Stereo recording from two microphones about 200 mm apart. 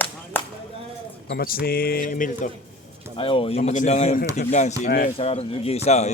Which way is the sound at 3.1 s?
25° left (ahead or behind).